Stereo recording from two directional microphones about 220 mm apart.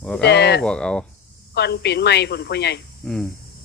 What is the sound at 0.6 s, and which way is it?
Speech, 5° left (ahead or behind).